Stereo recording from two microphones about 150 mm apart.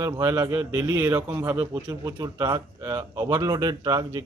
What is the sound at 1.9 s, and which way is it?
Speech, 25° right (ahead or behind).